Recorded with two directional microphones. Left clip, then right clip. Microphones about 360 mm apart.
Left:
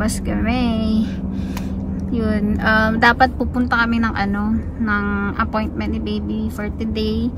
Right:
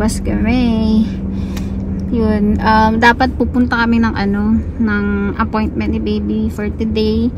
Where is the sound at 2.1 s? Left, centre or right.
Centre.